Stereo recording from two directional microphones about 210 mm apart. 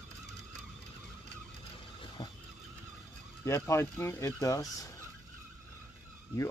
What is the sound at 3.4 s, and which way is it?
Speech, 15° left (ahead or behind).